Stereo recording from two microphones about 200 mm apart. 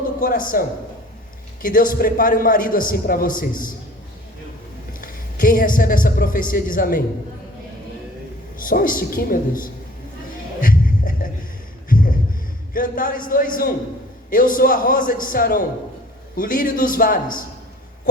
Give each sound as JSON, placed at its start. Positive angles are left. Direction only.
{"t": 0.0, "sound": "a man's voice", "side_deg": 45}
{"t": 1.6, "sound": "a man's voice", "side_deg": 45}
{"t": 4.9, "sound": "a man's voice", "side_deg": 45}
{"t": 8.5, "sound": "a man's voice", "side_deg": 45}
{"t": 10.6, "sound": "music", "side_deg": 45}
{"t": 11.9, "sound": "a sound", "side_deg": 45}
{"t": 12.7, "sound": "a man's voice", "side_deg": 45}